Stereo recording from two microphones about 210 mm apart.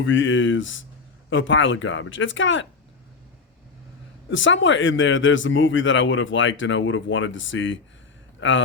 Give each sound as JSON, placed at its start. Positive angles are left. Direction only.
{"t": 0.0, "sound": "speech", "side_deg": 65}
{"t": 4.3, "sound": "a man's voice", "side_deg": 65}